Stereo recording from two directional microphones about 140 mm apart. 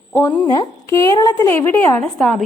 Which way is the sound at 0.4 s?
25° left (ahead or behind).